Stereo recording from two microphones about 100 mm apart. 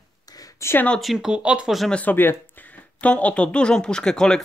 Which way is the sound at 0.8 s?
5° left (ahead or behind).